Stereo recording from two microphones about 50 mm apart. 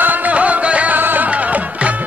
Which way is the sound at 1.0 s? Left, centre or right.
Right.